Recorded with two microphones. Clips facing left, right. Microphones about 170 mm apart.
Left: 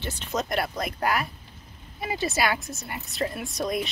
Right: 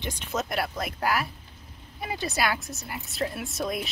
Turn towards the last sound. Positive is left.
turn(degrees=-5)  # may be behind; listen again after turning